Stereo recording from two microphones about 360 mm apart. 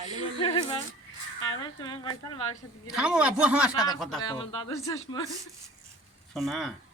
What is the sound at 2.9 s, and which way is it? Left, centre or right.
Speech, centre.